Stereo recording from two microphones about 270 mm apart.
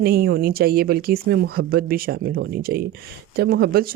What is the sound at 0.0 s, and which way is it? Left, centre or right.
Speech, right.